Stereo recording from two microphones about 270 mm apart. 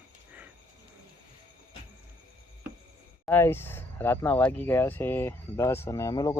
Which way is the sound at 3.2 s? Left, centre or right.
Centre.